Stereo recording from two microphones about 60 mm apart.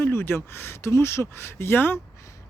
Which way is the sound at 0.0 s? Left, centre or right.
Left.